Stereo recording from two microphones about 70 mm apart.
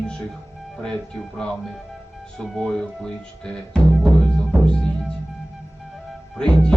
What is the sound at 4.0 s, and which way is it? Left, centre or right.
Music, centre.